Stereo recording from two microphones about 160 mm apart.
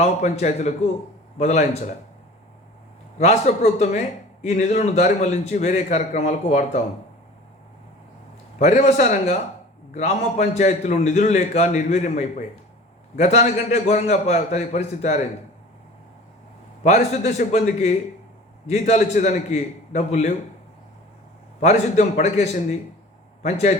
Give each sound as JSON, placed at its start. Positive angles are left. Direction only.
{"t": 0.0, "sound": "a man's voice", "side_deg": 45}
{"t": 3.2, "sound": "a man's voice", "side_deg": 40}
{"t": 8.5, "sound": "a man's voice", "side_deg": 45}
{"t": 16.8, "sound": "a man's voice", "side_deg": 45}
{"t": 21.6, "sound": "a man's voice", "side_deg": 45}